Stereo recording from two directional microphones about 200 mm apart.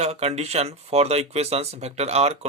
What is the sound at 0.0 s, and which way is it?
Speech, 30° right (ahead or behind).